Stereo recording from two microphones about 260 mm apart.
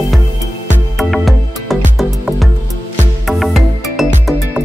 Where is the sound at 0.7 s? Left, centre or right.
Centre.